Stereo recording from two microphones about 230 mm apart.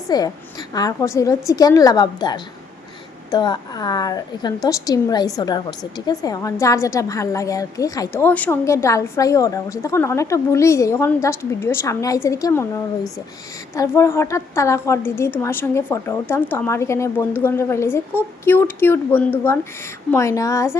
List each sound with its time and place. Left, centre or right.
0.1 s a woman's voice: centre
13.7 s a woman's voice: centre